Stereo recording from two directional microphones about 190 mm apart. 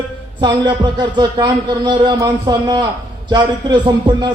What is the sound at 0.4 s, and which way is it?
A man's voice, 25° right (ahead or behind).